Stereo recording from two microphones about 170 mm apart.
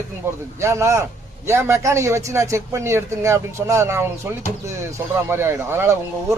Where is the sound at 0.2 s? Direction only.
15° right (ahead or behind).